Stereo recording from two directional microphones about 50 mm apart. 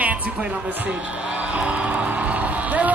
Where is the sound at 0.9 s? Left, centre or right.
Right.